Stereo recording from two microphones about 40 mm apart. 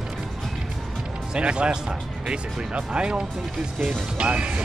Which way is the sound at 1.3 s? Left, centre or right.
Right.